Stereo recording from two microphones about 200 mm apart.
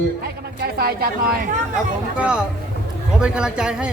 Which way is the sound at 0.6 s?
50° right (ahead or behind).